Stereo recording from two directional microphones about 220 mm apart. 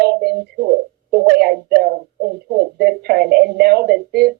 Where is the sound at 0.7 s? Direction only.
45° right (ahead or behind).